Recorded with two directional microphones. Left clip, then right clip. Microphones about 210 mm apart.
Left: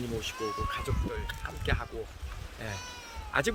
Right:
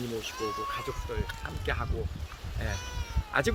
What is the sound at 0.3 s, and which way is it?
Speech, 55° right (ahead or behind).